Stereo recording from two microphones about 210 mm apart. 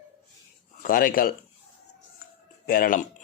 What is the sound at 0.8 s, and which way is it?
Speech, 40° left (ahead or behind).